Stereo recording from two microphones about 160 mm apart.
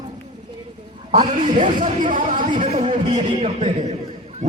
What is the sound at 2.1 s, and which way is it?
Speech, 55° right (ahead or behind).